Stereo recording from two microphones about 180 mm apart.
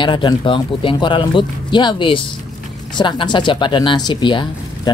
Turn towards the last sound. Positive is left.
turn(degrees=25)  # may be behind; listen again after turning